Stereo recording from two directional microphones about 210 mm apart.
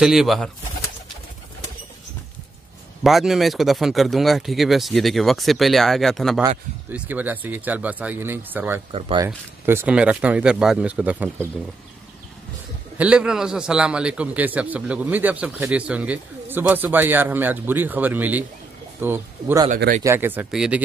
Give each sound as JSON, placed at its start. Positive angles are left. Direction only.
{"t": 0.0, "sound": "speech", "side_deg": 0}
{"t": 3.0, "sound": "a man's voice", "side_deg": 0}
{"t": 8.9, "sound": "speech", "side_deg": -20}
{"t": 9.7, "sound": "speech", "side_deg": -10}
{"t": 12.9, "sound": "a man's voice", "side_deg": -5}